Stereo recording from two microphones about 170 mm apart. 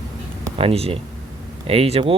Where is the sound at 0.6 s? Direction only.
35° right (ahead or behind).